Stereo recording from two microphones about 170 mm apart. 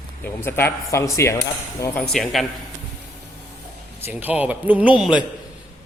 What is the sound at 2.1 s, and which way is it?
Speech, centre (ahead or behind).